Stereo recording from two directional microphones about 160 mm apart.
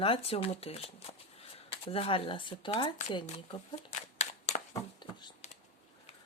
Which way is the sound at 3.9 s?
45° left (ahead or behind).